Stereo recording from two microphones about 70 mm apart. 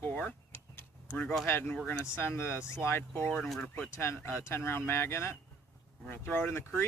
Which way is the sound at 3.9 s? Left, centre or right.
Left.